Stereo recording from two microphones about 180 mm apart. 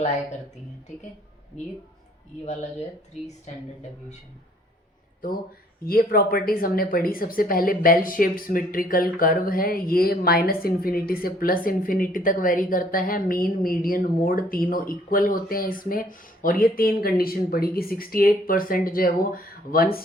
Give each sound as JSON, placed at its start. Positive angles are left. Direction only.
{"t": 5.2, "sound": "a woman's voice", "side_deg": 55}